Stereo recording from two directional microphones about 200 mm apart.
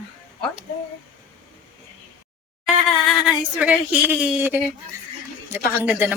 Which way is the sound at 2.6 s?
Centre (ahead or behind).